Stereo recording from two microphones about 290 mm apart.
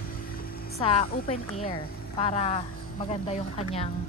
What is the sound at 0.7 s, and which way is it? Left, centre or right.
Speech, centre.